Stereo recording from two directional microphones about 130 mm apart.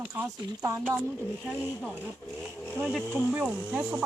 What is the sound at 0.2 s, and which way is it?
Speech, 20° right (ahead or behind).